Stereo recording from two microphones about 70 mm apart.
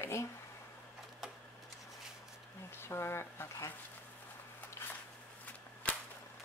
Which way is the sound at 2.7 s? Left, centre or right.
Left.